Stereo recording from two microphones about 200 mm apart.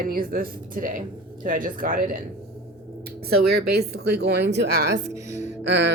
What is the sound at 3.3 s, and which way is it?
A woman's voice, 50° right (ahead or behind).